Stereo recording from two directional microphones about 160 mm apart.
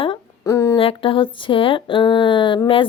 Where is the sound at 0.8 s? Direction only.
35° left (ahead or behind).